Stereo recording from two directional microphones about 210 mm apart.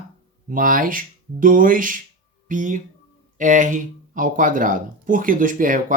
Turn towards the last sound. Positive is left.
turn(degrees=-40)  # may be behind; listen again after turning